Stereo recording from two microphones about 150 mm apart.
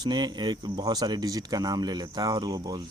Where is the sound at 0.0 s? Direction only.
30° right (ahead or behind).